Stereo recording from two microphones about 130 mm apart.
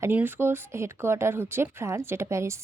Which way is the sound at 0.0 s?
15° right (ahead or behind).